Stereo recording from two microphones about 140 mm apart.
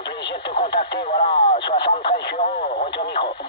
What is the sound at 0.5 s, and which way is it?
Speech, 35° left (ahead or behind).